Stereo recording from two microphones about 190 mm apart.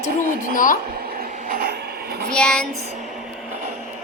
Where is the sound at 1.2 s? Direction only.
50° right (ahead or behind).